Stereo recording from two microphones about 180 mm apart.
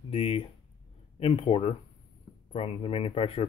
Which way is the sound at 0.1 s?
35° left (ahead or behind).